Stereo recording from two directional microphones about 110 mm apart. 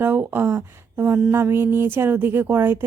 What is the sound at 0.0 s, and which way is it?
Speech, 20° right (ahead or behind).